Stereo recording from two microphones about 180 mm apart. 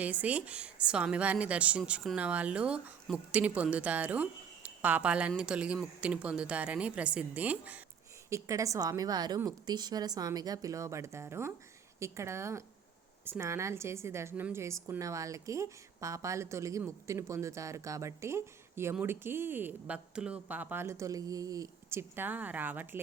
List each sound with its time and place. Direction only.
0.0 s a woman's voice: 10° right (ahead or behind)